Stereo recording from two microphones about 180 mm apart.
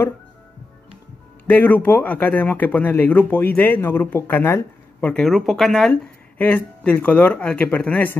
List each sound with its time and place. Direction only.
1.5 s speech: 10° left (ahead or behind)